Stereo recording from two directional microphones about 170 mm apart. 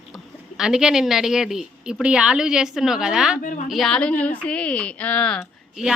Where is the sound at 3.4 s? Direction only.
50° left (ahead or behind).